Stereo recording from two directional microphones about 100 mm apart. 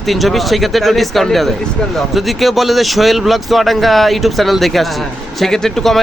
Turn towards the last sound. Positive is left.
turn(degrees=0)  # may be behind; listen again after turning